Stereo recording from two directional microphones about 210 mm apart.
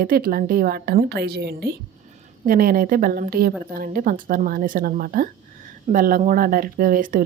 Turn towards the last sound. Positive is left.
turn(degrees=-40)  # may be behind; listen again after turning